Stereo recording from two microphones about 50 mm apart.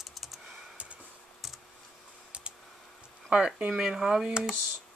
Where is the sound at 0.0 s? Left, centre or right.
Centre.